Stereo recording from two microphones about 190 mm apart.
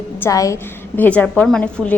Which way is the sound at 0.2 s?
15° left (ahead or behind).